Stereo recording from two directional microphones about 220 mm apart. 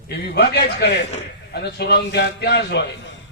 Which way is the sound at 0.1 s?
45° left (ahead or behind).